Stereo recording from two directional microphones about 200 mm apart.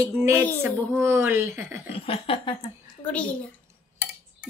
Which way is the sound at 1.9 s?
30° left (ahead or behind).